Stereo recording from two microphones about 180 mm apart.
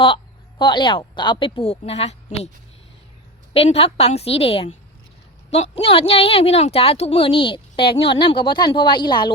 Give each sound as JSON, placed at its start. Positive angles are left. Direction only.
{"t": 0.6, "sound": "a woman's voice", "side_deg": 25}
{"t": 3.5, "sound": "a woman's voice", "side_deg": 35}